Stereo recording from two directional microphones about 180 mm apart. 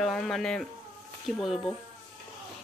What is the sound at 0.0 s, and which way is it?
Speech, centre (ahead or behind).